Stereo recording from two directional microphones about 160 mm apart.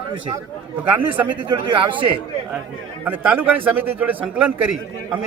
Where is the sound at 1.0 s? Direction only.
10° right (ahead or behind).